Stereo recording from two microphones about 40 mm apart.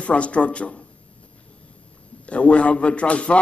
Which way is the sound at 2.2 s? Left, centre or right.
Left.